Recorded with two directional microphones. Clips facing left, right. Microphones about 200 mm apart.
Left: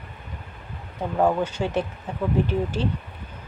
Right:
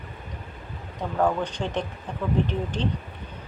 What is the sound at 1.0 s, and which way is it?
Speech, 10° left (ahead or behind).